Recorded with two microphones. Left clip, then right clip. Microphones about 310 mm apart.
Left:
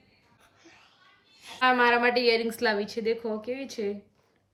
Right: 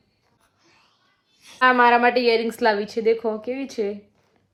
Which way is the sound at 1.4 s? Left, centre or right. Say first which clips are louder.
Right 6 dB; centre.